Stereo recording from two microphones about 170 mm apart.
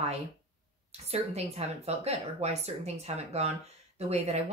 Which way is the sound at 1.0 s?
40° right (ahead or behind).